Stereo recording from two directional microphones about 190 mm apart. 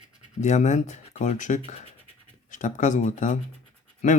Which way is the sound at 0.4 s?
40° left (ahead or behind).